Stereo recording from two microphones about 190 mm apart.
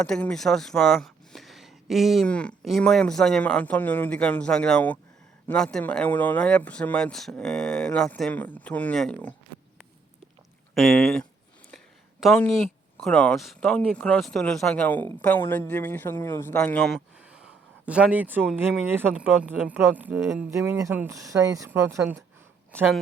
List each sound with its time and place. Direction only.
0.0 s a man's voice: 5° left (ahead or behind)
10.8 s a man's voice: centre (ahead or behind); by 22.0 s 15° right (ahead or behind)